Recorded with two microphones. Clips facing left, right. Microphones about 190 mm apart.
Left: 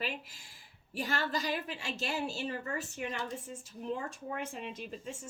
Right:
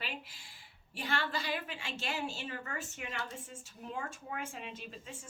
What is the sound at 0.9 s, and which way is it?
A woman's voice, 40° left (ahead or behind).